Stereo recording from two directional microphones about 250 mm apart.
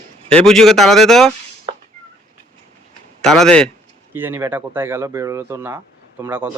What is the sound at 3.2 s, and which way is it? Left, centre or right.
Speech, centre.